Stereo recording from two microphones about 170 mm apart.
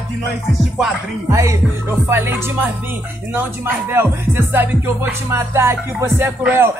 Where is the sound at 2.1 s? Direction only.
15° right (ahead or behind).